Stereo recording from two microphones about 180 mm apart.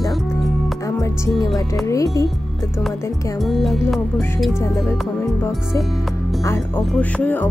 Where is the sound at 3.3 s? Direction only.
Centre (ahead or behind).